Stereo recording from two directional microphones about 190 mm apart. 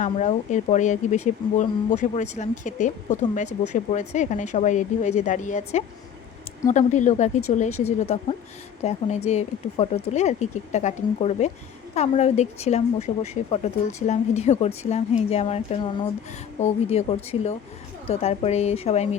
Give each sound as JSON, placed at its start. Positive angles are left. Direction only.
{"t": 0.0, "sound": "speech", "side_deg": 40}